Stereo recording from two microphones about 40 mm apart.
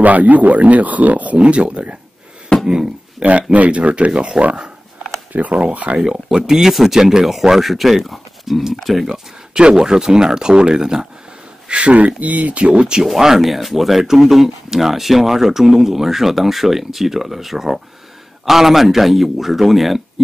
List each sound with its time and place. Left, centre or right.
0.0 s speech: right
2.6 s a sound: centre
3.5 s speech: right
6.5 s speech: centre
9.5 s speech: right
11.7 s speech: right
13.0 s speech: centre